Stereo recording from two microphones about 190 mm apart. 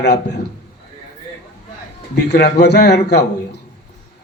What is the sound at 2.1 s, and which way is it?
A man's voice, 60° left (ahead or behind).